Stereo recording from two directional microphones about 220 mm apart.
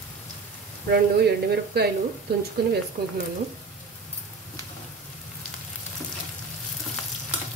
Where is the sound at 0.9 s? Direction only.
50° right (ahead or behind).